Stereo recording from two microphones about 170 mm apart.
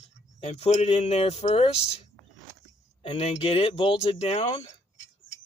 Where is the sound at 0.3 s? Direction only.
40° left (ahead or behind).